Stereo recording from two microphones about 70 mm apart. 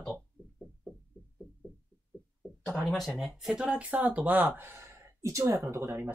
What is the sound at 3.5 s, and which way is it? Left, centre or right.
Speech, centre.